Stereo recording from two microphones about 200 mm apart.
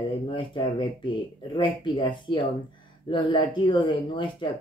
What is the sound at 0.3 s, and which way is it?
Speech, 25° left (ahead or behind).